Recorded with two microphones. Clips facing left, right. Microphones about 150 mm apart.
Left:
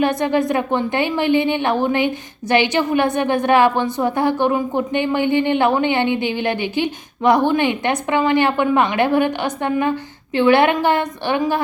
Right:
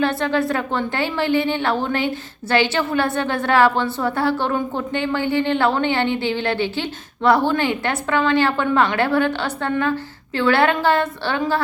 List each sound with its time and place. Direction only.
0.0 s speech: 15° left (ahead or behind)